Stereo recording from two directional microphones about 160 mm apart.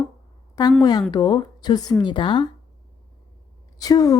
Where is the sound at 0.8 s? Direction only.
25° left (ahead or behind).